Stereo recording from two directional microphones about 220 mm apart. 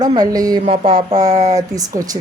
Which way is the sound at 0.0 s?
20° right (ahead or behind).